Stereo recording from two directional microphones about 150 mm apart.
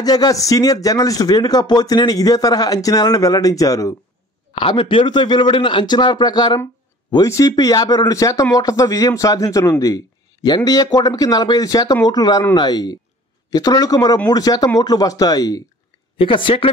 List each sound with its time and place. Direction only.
0.0 s speech: 25° left (ahead or behind)
4.6 s speech: 35° left (ahead or behind)